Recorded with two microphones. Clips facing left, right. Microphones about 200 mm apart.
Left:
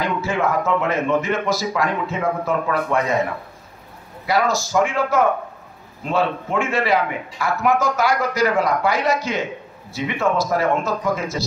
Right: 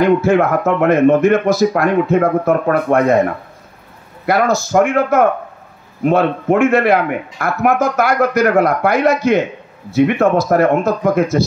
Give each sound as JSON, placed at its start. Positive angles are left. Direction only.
{"t": 0.0, "sound": "a man's voice", "side_deg": -55}
{"t": 4.6, "sound": "a man's voice", "side_deg": -55}